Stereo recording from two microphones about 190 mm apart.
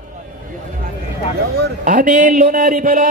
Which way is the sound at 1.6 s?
45° right (ahead or behind).